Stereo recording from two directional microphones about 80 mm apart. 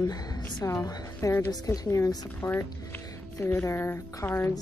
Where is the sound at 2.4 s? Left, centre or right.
Left.